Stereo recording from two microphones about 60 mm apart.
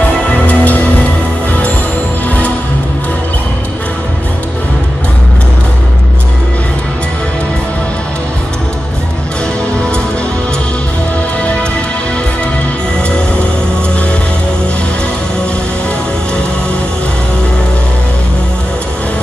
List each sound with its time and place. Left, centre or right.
0.5 s music: left
2.2 s music: left